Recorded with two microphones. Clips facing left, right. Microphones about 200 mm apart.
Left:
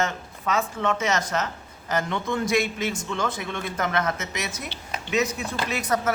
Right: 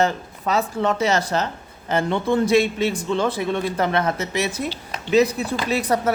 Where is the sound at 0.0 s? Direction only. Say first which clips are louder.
Right 6 dB; 35° right (ahead or behind).